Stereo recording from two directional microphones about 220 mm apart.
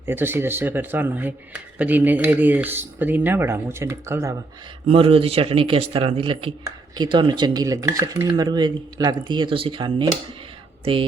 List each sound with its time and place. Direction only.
0.0 s speech: 10° right (ahead or behind)
4.9 s speech: 25° right (ahead or behind)